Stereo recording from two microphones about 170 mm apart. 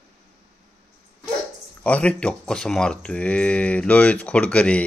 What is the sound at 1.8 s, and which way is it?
Speech, 10° left (ahead or behind).